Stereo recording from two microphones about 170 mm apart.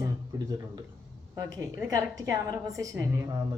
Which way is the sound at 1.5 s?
20° right (ahead or behind).